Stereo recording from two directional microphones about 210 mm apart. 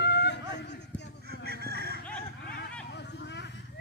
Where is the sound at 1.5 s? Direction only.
50° right (ahead or behind).